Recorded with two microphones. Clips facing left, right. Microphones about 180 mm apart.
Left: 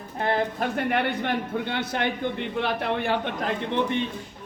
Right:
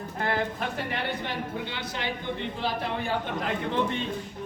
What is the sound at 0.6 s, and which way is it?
A man's voice, 60° left (ahead or behind).